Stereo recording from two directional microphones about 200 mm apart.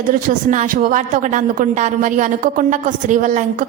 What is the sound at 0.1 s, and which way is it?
A woman's voice, 40° right (ahead or behind).